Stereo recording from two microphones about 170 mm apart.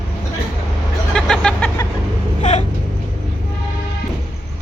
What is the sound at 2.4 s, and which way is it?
Vehicle, 45° left (ahead or behind).